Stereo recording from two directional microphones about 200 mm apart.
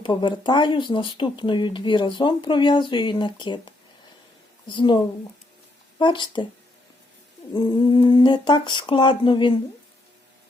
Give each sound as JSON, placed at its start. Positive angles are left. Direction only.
{"t": 0.0, "sound": "speech", "side_deg": 25}
{"t": 7.5, "sound": "speech", "side_deg": 20}